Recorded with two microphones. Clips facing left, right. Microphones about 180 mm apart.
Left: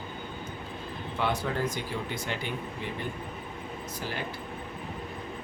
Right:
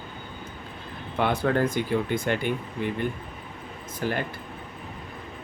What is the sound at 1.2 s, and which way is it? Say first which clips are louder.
Speech: right 6 dB; 55° right (ahead or behind).